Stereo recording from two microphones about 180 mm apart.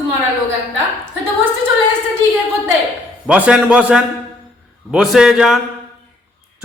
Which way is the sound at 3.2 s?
5° right (ahead or behind).